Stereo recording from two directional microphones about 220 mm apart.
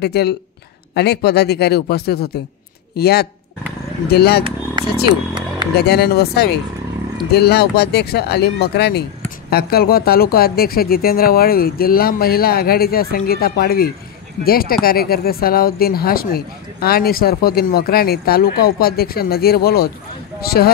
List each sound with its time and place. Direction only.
0.0 s speech: 50° left (ahead or behind)
5.0 s a sound: 20° right (ahead or behind)
5.8 s speech: 45° left (ahead or behind)